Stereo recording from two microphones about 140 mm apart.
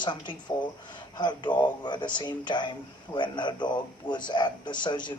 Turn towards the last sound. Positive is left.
turn(degrees=35)  # may be behind; listen again after turning